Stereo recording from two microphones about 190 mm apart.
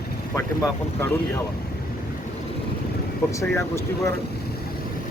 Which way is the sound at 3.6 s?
15° left (ahead or behind).